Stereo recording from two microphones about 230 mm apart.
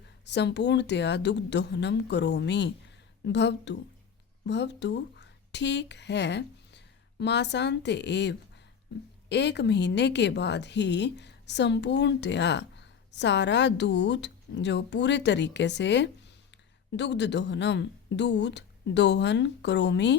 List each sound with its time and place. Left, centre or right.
0.3 s a woman's voice: left